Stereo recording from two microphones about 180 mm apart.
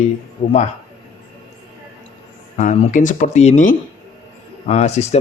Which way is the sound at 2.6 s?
45° left (ahead or behind).